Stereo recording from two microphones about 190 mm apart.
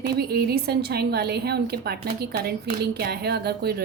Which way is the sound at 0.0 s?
55° right (ahead or behind).